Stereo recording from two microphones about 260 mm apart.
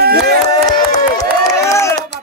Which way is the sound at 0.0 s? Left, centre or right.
Right.